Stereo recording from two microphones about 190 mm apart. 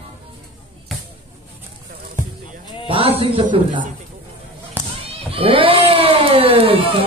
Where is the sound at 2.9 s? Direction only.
30° right (ahead or behind).